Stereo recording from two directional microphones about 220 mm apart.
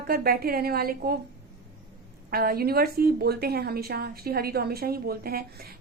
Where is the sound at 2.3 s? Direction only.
45° right (ahead or behind).